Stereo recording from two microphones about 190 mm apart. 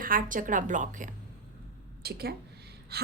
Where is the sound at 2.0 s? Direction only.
55° right (ahead or behind).